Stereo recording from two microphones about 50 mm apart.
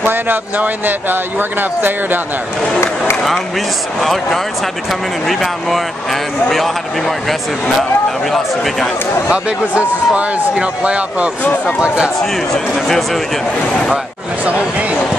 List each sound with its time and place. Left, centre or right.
0.0 s speech: right
4.0 s speech: centre
9.3 s speech: right
12.7 s speech: centre
14.4 s speech: right